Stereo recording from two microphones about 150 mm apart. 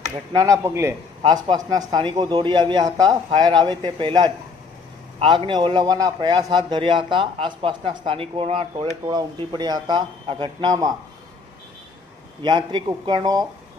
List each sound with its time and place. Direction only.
0.3 s a man's voice: 20° right (ahead or behind)
1.2 s a man's voice: 30° right (ahead or behind)
12.4 s a man's voice: 30° right (ahead or behind)